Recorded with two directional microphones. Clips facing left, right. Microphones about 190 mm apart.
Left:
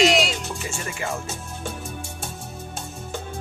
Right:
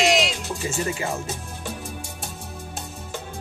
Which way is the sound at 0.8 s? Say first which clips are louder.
Right 3 dB; 20° right (ahead or behind).